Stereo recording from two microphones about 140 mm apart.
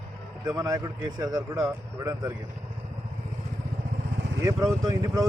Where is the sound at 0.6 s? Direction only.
25° right (ahead or behind).